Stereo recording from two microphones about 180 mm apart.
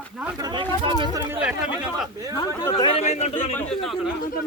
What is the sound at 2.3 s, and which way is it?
Speech, 25° left (ahead or behind).